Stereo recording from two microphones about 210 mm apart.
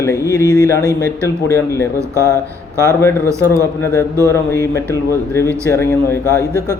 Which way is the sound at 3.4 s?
10° left (ahead or behind).